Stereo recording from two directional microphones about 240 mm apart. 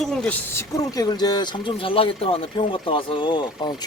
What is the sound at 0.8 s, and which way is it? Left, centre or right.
Speech, centre.